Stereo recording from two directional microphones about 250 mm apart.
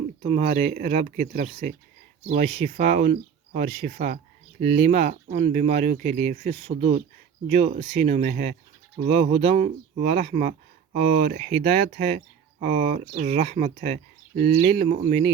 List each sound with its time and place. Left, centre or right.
0.2 s speech: right
14.8 s speech: right